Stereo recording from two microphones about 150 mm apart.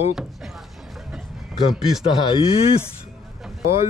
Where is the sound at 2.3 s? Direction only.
35° left (ahead or behind).